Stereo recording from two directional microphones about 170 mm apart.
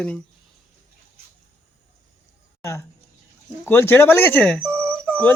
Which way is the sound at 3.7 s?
15° left (ahead or behind).